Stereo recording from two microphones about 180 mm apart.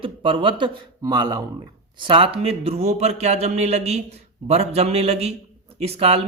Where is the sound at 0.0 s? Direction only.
30° right (ahead or behind).